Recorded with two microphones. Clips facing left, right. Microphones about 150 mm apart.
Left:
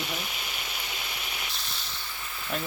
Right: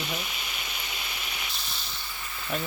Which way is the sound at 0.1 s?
Centre (ahead or behind).